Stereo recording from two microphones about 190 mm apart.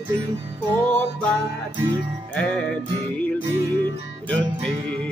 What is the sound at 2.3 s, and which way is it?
Music, 5° left (ahead or behind).